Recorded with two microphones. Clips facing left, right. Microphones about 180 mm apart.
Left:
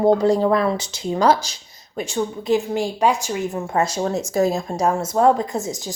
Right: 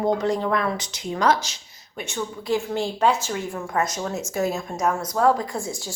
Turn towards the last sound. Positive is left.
turn(degrees=20)  # may be behind; listen again after turning